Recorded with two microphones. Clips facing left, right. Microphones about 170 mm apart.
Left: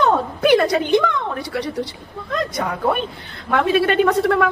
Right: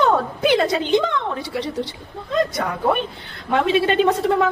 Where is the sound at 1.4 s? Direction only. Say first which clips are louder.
Left 1 dB; 15° left (ahead or behind).